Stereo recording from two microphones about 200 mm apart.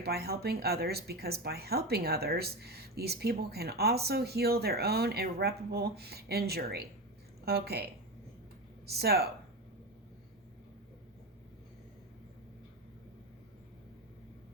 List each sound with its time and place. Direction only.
0.0 s speech: 50° right (ahead or behind)
8.9 s speech: 50° right (ahead or behind)